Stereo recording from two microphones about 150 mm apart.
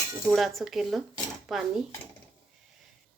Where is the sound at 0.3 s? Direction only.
Centre (ahead or behind).